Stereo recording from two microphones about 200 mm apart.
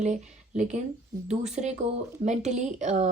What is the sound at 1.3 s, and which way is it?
A woman's voice, 35° right (ahead or behind).